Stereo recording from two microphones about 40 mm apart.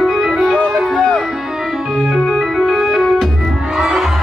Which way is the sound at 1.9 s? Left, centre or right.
Centre.